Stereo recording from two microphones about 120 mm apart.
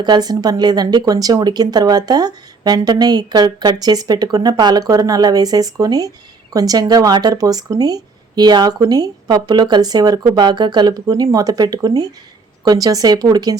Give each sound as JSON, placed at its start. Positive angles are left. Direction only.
{"t": 0.0, "sound": "speech", "side_deg": -35}